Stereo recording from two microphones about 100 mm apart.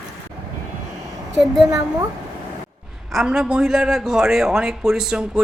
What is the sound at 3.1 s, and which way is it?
A man's voice, 5° right (ahead or behind).